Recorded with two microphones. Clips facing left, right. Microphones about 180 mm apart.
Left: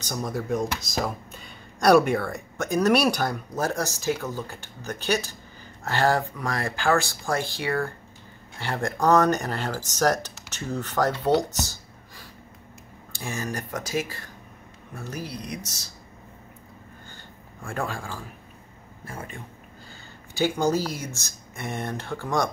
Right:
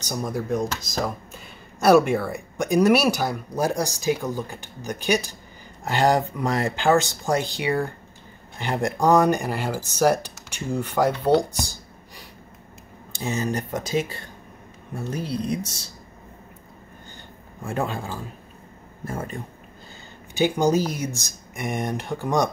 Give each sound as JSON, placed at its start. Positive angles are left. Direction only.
{"t": 0.1, "sound": "speech", "side_deg": -5}
{"t": 11.5, "sound": "a sound", "side_deg": -15}
{"t": 13.1, "sound": "speech", "side_deg": -20}
{"t": 17.6, "sound": "speech", "side_deg": -20}
{"t": 19.0, "sound": "speech", "side_deg": -40}
{"t": 20.3, "sound": "speech", "side_deg": -15}